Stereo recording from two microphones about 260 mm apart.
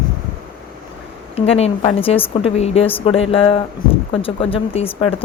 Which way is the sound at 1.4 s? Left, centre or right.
Left.